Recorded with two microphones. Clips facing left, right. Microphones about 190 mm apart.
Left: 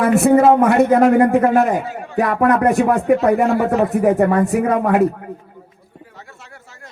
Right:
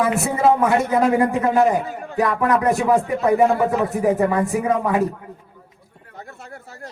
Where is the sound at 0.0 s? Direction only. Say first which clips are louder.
Left 6 dB; 65° left (ahead or behind).